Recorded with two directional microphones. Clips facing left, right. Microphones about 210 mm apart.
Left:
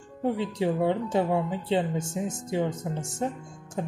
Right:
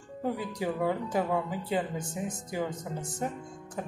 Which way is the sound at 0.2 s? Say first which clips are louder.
Left 5 dB; 25° left (ahead or behind).